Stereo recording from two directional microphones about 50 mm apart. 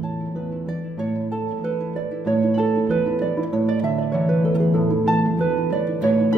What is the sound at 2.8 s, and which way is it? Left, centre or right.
Harp, centre.